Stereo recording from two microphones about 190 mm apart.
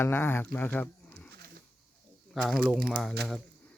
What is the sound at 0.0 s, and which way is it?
Speech, 10° left (ahead or behind).